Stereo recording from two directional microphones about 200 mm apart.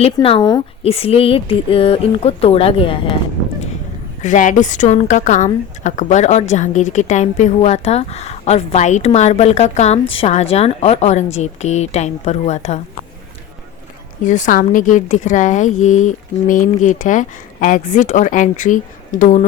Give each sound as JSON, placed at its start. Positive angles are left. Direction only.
{"t": 0.0, "sound": "speech", "side_deg": 25}
{"t": 4.2, "sound": "a woman's voice", "side_deg": 40}
{"t": 14.3, "sound": "a woman's voice", "side_deg": 40}